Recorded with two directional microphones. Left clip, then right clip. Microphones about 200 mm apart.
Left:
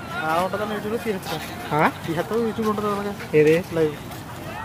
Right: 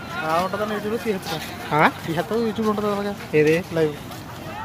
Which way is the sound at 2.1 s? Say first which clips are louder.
Even; 50° right (ahead or behind).